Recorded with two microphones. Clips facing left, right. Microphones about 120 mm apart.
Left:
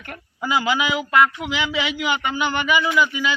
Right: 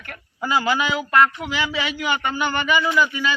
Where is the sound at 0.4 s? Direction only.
10° left (ahead or behind).